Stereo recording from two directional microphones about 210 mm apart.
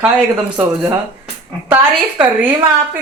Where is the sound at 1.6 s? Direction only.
10° right (ahead or behind).